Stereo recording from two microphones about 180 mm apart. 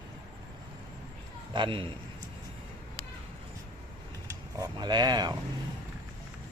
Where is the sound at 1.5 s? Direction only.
30° right (ahead or behind).